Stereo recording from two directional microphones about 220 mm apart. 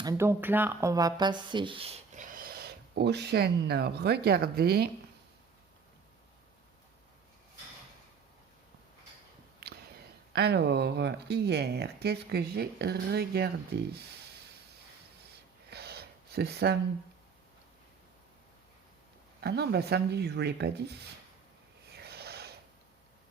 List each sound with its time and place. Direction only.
0.0 s speech: 15° right (ahead or behind); by 4.9 s 45° right (ahead or behind)
9.6 s a sound: 45° right (ahead or behind)
10.3 s speech: 50° right (ahead or behind)
15.7 s a sound: 45° right (ahead or behind)
19.4 s speech: 50° right (ahead or behind)
21.9 s rub: 45° right (ahead or behind)